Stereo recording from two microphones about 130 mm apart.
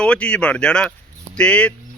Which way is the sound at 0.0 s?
10° left (ahead or behind).